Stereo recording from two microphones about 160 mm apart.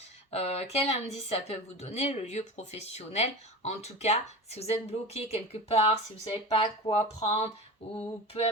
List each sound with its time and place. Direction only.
0.3 s speech: 40° left (ahead or behind)